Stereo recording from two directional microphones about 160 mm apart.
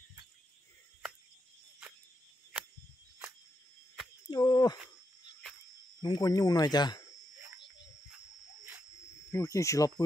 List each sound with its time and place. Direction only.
4.3 s a sound: 25° left (ahead or behind)
6.0 s speech: 25° left (ahead or behind)
9.3 s speech: 20° left (ahead or behind)